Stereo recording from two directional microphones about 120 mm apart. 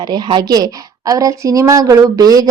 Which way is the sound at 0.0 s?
35° right (ahead or behind).